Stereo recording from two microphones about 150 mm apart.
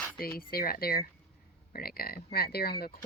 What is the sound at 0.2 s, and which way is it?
Speech, 80° left.